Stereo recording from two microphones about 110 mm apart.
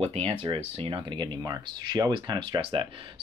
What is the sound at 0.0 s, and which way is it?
Speech, 65° right (ahead or behind).